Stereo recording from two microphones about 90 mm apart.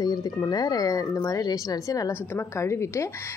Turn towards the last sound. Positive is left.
turn(degrees=30)  # may be behind; listen again after turning